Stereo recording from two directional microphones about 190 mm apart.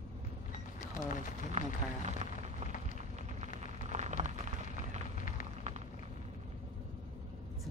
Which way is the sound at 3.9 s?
40° right (ahead or behind).